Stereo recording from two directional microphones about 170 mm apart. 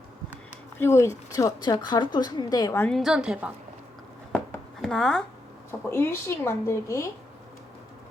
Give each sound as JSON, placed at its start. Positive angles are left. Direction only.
{"t": 0.8, "sound": "speech", "side_deg": 15}
{"t": 2.8, "sound": "a woman's voice", "side_deg": 0}
{"t": 4.8, "sound": "speech", "side_deg": 5}
{"t": 5.9, "sound": "speech", "side_deg": 15}